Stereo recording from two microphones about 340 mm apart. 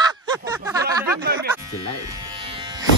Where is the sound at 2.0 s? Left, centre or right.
Centre.